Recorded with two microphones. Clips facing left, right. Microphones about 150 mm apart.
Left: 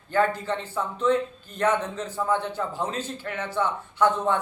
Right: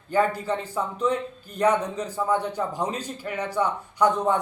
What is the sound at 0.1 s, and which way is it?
A man's voice, 10° right (ahead or behind).